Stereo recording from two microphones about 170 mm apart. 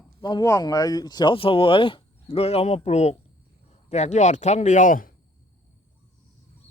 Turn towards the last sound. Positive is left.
turn(degrees=50)  # may be behind; listen again after turning